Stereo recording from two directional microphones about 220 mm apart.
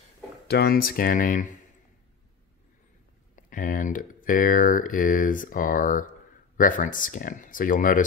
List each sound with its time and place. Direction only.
0.5 s speech: 45° left (ahead or behind)
3.3 s speech: 35° left (ahead or behind)